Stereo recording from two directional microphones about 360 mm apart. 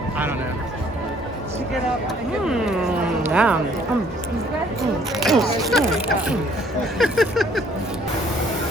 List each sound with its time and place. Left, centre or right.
3.2 s speech: centre
5.2 s speech: centre
7.0 s a sound: centre